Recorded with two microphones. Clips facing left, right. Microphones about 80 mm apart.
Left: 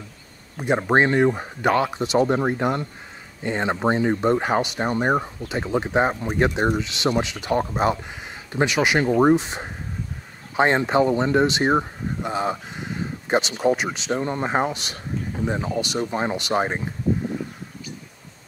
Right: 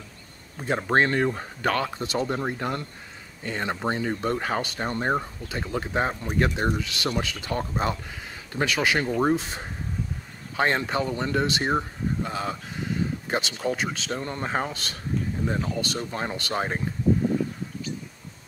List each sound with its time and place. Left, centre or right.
0.6 s speech: centre